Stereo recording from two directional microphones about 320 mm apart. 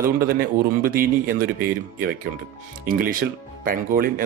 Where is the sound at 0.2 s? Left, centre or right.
Right.